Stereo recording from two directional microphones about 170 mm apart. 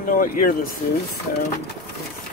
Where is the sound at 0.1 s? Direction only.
55° left (ahead or behind).